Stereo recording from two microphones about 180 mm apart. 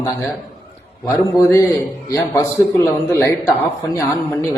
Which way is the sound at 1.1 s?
15° left (ahead or behind).